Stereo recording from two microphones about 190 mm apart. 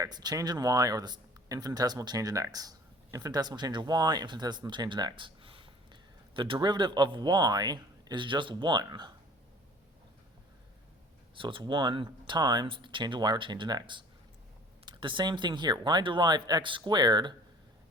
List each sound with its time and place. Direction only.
0.0 s speech: 20° right (ahead or behind)
11.3 s speech: 25° right (ahead or behind)